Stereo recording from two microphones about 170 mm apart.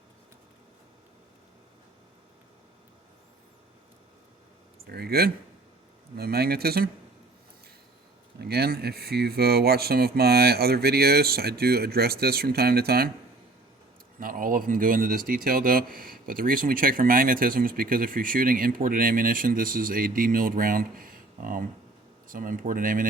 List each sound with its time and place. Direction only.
4.9 s speech: 65° right (ahead or behind)
8.4 s speech: 70° right (ahead or behind)
14.2 s speech: 55° right (ahead or behind)